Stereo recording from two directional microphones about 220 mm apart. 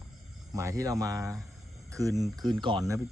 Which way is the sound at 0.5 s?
15° right (ahead or behind).